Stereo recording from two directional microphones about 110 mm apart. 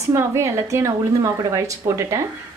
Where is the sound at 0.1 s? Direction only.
25° right (ahead or behind).